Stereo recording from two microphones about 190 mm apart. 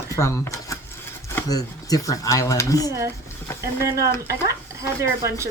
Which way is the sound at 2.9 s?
15° right (ahead or behind).